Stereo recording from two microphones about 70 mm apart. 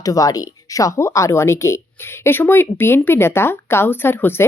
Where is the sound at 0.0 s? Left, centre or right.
Left.